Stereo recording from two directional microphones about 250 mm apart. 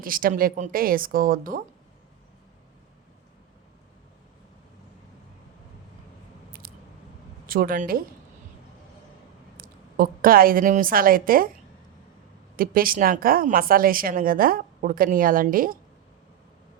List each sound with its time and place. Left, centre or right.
0.0 s a woman's voice: right
7.4 s speech: right
9.6 s a woman's voice: right
12.5 s a woman's voice: right